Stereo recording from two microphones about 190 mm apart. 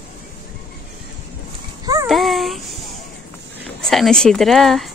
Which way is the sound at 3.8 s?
Centre (ahead or behind).